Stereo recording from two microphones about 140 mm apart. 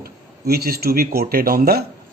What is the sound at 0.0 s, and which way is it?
Speech, 90° right.